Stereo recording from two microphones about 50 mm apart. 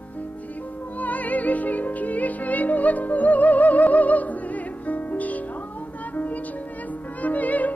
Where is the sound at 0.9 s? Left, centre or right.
Left.